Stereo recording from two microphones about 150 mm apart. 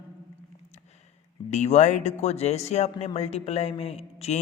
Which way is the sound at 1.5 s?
50° left (ahead or behind).